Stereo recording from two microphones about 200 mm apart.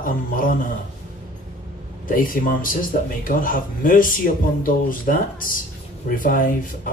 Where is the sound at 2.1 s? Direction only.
45° left (ahead or behind).